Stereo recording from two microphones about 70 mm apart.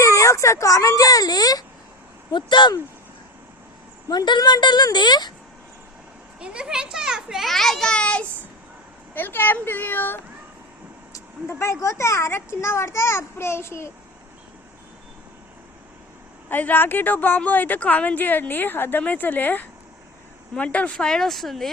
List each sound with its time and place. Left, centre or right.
0.0 s speech: left
2.6 s a woman's voice: left
4.1 s a woman's voice: left
6.4 s a child's voice: centre
9.1 s a woman's voice: left
11.4 s a child's voice: left
16.5 s a woman's voice: left; by 21.7 s centre